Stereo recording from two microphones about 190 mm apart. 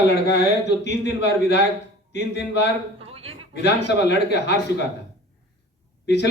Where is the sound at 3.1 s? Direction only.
30° right (ahead or behind).